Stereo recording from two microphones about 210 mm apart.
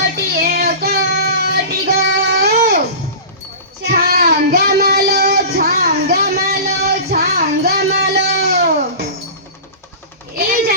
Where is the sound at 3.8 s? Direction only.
50° right (ahead or behind).